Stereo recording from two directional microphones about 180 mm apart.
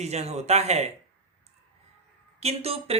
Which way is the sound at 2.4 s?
35° right (ahead or behind).